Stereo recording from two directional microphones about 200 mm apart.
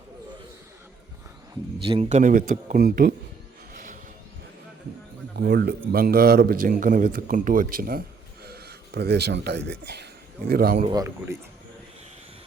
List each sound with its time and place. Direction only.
1.9 s speech: 35° right (ahead or behind)
5.4 s a man's voice: 55° right (ahead or behind)
10.8 s speech: 15° right (ahead or behind)